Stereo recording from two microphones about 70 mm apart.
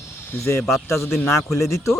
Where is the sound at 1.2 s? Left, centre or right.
Left.